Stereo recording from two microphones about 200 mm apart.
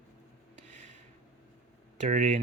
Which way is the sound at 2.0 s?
35° right (ahead or behind).